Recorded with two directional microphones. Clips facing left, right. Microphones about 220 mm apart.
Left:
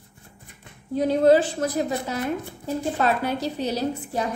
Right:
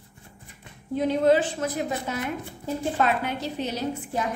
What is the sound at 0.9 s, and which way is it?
A woman's voice, 35° left (ahead or behind).